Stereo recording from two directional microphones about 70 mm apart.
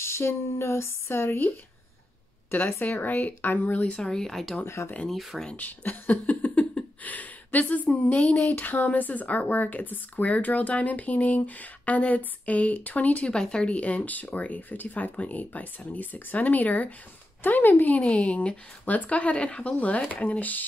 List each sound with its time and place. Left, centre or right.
0.0 s speech: left
2.5 s speech: left
3.8 s speech: centre
4.6 s speech: left
5.6 s a sound: left
8.5 s speech: left
13.3 s speech: centre